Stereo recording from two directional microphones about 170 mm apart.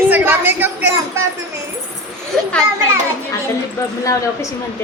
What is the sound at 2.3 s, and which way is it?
Children playing, 5° left (ahead or behind).